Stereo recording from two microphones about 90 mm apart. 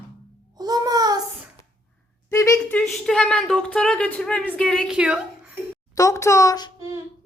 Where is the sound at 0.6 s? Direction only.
45° right (ahead or behind).